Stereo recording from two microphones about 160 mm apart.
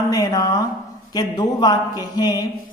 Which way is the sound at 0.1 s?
20° left (ahead or behind).